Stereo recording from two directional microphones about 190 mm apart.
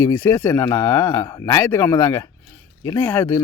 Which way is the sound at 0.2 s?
10° left (ahead or behind).